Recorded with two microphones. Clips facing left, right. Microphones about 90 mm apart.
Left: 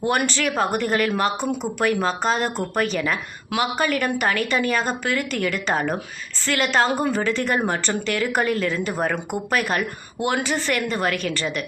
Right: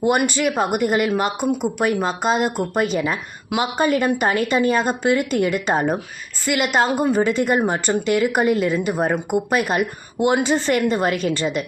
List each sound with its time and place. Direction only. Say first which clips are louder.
0.3 s a woman's voice: right 2 dB; 15° right (ahead or behind)